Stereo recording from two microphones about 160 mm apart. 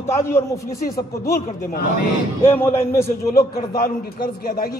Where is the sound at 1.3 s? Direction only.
70° left (ahead or behind).